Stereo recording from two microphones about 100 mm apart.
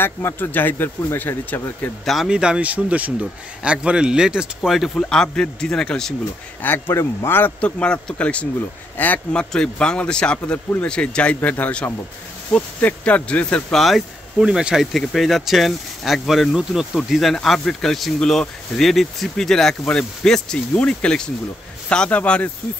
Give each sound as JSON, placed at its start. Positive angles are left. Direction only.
{"t": 0.0, "sound": "a man's voice", "side_deg": 25}
{"t": 2.0, "sound": "a man's voice", "side_deg": -5}
{"t": 6.6, "sound": "a man's voice", "side_deg": 25}